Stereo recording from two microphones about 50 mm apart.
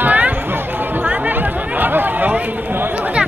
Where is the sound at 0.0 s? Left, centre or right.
Right.